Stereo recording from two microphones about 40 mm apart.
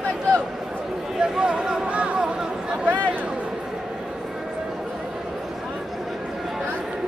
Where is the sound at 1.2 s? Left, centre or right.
Right.